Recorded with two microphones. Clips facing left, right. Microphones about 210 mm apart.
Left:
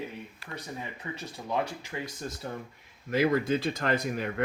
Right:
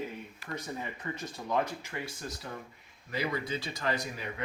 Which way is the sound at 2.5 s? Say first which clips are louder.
Left 6 dB; 35° left (ahead or behind).